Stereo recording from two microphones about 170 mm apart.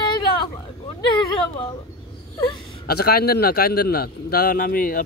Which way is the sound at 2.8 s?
65° left (ahead or behind).